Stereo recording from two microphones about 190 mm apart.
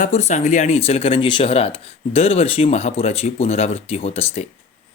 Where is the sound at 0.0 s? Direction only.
35° left (ahead or behind).